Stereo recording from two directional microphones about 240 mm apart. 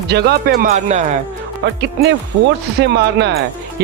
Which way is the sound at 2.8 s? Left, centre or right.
Right.